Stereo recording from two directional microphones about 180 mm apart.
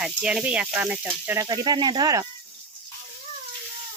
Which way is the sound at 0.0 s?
5° right (ahead or behind).